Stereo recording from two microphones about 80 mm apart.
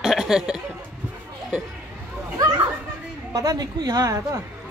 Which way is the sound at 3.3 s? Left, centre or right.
Right.